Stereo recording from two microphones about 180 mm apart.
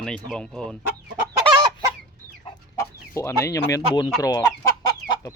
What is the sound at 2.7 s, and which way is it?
Speech, 15° left (ahead or behind).